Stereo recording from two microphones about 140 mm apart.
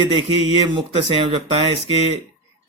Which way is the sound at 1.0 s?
40° right (ahead or behind).